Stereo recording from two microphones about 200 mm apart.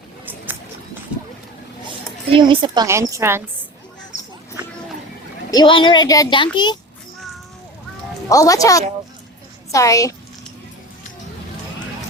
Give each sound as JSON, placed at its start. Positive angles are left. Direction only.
{"t": 2.3, "sound": "a woman's voice", "side_deg": -25}
{"t": 5.5, "sound": "speech", "side_deg": 20}
{"t": 8.3, "sound": "a woman's voice", "side_deg": 15}